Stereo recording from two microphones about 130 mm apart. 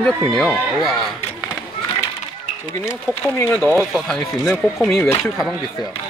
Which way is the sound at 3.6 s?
20° right (ahead or behind).